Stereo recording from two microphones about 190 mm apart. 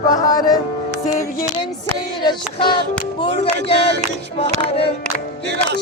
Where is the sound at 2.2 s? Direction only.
25° left (ahead or behind).